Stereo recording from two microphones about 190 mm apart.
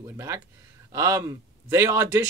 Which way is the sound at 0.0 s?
15° right (ahead or behind).